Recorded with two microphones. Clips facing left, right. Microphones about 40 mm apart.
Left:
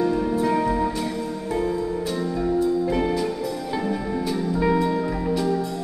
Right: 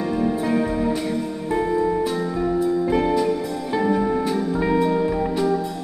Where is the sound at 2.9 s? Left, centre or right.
Centre.